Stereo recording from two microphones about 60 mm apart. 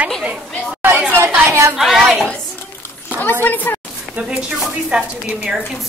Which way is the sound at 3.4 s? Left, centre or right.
Left.